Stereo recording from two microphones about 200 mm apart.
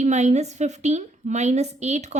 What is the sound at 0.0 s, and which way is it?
A woman's voice, 35° right (ahead or behind).